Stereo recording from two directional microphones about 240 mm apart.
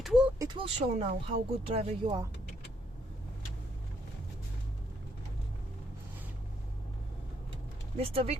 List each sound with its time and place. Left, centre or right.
0.0 s a sound: centre
0.3 s speech: centre
7.9 s speech: right